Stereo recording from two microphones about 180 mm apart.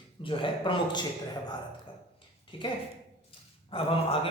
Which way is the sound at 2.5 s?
30° left (ahead or behind).